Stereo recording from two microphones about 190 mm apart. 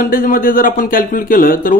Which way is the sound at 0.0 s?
45° left (ahead or behind).